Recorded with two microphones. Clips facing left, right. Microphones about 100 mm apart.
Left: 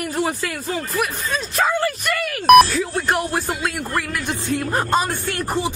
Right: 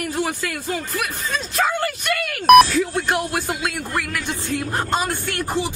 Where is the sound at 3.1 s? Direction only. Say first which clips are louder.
Left 1 dB; 35° left (ahead or behind).